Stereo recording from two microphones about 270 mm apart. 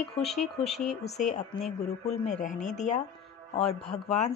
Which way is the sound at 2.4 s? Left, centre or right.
Left.